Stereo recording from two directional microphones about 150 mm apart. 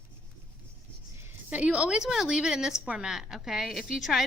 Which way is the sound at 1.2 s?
10° right (ahead or behind).